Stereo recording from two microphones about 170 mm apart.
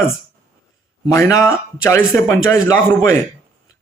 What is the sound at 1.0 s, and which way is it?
Speech, 15° left (ahead or behind).